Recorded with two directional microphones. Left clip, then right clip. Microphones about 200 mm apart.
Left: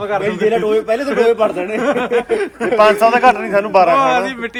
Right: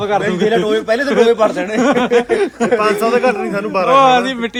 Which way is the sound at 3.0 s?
10° left (ahead or behind).